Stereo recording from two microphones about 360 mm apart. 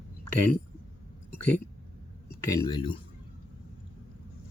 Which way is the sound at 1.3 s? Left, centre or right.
Centre.